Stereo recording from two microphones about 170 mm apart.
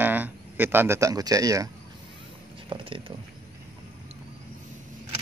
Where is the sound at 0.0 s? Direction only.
10° right (ahead or behind).